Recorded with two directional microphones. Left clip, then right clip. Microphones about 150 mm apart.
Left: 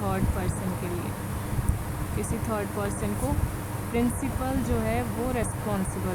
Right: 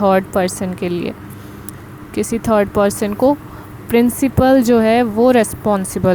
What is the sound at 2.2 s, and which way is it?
Speech, 55° right (ahead or behind).